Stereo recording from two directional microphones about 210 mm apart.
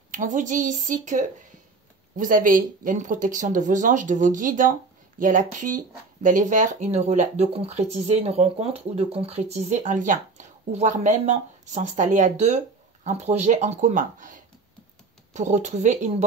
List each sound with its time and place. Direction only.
0.1 s speech: 40° right (ahead or behind)